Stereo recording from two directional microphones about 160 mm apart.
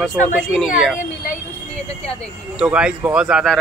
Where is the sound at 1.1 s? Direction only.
65° left (ahead or behind).